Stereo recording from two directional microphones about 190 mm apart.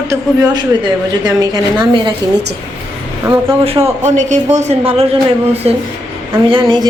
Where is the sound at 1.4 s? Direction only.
25° right (ahead or behind).